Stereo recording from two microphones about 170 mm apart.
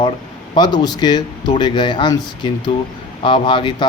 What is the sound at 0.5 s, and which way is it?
Speech, 25° left (ahead or behind).